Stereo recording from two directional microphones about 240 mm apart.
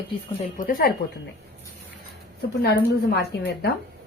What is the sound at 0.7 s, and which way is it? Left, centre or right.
Speech, left.